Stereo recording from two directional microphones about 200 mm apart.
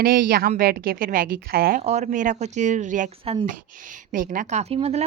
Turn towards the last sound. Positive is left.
turn(degrees=-30)  # may be behind; listen again after turning